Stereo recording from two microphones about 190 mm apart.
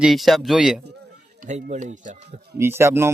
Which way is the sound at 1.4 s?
40° right (ahead or behind).